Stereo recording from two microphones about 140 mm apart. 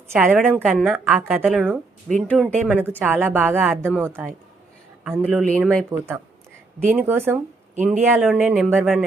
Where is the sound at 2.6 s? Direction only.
10° right (ahead or behind).